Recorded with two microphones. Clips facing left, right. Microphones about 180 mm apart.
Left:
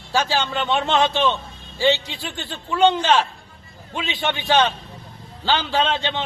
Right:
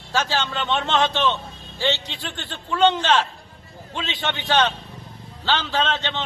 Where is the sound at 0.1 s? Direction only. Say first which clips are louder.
Left 2 dB; 10° left (ahead or behind).